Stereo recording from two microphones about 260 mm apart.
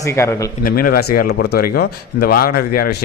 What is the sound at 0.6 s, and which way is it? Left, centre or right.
Speech, left.